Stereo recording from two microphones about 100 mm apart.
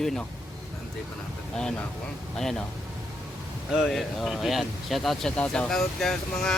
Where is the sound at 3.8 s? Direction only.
Centre (ahead or behind).